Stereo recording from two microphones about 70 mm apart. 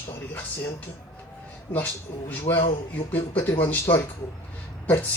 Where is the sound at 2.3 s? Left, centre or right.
Left.